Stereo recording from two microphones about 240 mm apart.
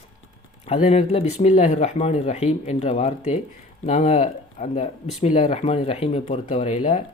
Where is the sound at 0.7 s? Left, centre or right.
Left.